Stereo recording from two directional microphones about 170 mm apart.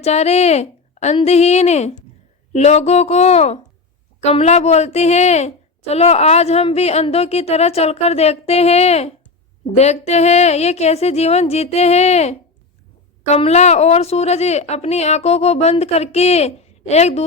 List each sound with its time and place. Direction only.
0.0 s a woman's voice: 40° left (ahead or behind)